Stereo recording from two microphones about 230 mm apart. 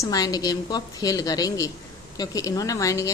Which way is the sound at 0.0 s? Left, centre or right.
Centre.